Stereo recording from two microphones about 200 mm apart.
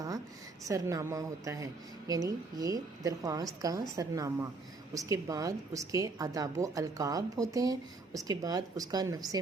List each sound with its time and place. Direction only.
0.6 s a woman's voice: 15° right (ahead or behind)